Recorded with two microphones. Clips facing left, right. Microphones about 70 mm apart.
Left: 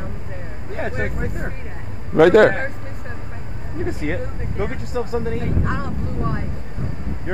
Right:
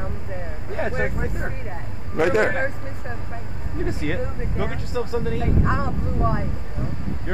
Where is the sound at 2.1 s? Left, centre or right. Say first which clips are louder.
Left 8 dB; left.